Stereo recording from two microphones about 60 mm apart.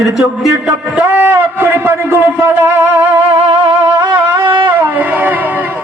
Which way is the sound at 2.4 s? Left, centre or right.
Right.